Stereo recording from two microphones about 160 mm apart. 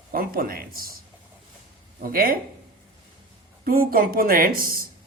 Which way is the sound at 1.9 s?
65° right (ahead or behind).